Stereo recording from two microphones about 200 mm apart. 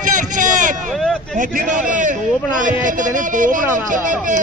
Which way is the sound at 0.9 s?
5° left (ahead or behind).